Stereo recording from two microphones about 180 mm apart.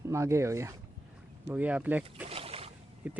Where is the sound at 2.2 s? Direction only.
30° right (ahead or behind).